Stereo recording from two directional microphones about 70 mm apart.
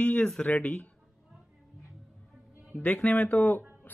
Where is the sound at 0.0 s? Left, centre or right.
Centre.